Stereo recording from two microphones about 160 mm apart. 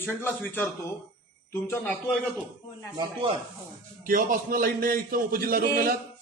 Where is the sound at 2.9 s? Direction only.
30° right (ahead or behind).